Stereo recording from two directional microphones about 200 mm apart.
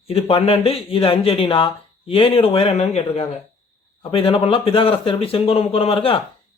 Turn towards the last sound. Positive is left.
turn(degrees=25)  # may be behind; listen again after turning